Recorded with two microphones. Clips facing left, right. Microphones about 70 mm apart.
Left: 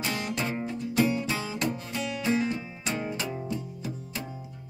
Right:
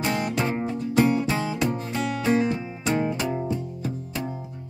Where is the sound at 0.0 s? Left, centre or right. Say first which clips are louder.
Right 6 dB; right.